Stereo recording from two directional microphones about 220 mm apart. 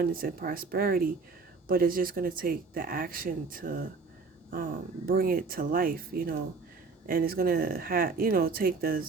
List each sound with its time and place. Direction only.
0.0 s speech: 40° right (ahead or behind)